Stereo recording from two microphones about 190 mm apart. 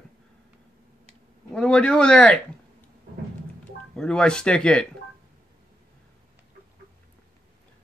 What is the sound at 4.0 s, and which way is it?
Speech, 5° left (ahead or behind).